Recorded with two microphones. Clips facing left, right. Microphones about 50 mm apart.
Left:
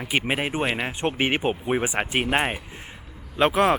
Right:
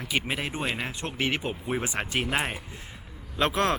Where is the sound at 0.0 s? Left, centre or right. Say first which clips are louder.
Left 5 dB; left.